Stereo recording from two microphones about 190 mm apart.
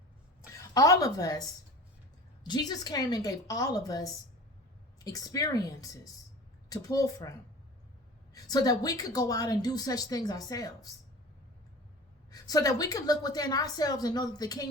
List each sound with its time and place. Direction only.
0.5 s a woman's voice: 15° left (ahead or behind)
2.4 s a woman's voice: 20° left (ahead or behind)
12.3 s a woman's voice: 20° left (ahead or behind)